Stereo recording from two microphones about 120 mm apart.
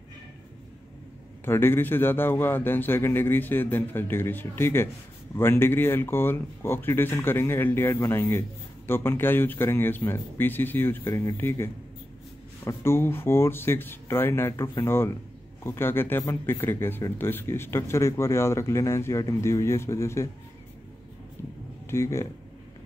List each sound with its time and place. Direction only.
1.4 s a man's voice: 20° left (ahead or behind)
21.9 s speech: 25° left (ahead or behind)